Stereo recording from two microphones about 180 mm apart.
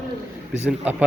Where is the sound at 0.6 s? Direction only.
10° right (ahead or behind).